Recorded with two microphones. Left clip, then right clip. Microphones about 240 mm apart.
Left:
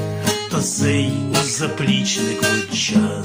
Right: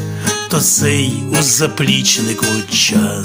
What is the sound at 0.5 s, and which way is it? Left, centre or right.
Music, right.